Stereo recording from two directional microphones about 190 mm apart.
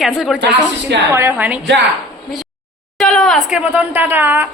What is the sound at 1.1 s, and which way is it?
Speech, 10° right (ahead or behind).